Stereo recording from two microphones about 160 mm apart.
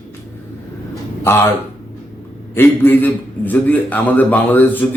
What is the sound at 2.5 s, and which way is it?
A man's voice, 15° left (ahead or behind).